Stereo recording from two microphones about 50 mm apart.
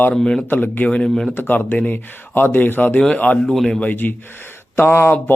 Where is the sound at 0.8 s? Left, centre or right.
Left.